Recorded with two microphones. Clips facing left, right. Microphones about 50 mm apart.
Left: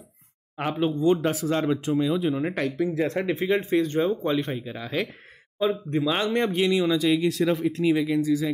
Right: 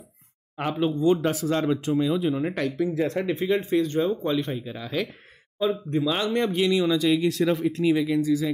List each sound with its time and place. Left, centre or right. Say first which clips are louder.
1.0 s speech: even; centre
6.6 s speech: right 1 dB; centre